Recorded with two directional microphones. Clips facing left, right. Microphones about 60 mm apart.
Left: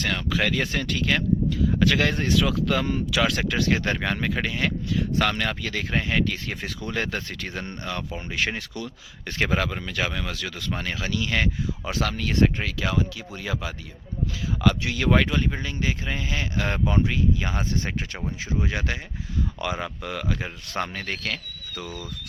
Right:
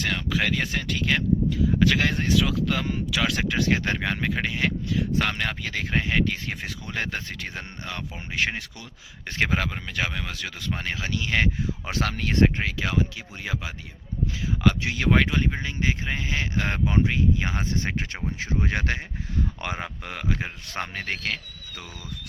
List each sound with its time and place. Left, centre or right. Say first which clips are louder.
0.0 s speech: left 1 dB; centre; by 11.4 s right
11.9 s speech: left 1 dB; right
19.6 s speech: left 3 dB; right